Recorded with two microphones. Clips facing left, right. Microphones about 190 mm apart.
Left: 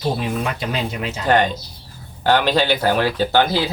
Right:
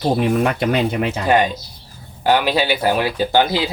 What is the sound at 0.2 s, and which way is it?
Speech, 55° right (ahead or behind).